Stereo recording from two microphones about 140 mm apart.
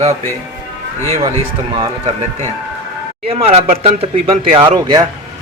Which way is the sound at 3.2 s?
45° right (ahead or behind).